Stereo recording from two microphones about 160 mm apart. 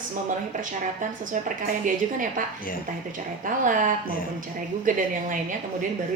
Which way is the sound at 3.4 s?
55° right (ahead or behind).